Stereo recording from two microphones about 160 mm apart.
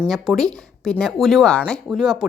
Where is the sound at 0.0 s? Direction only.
Centre (ahead or behind).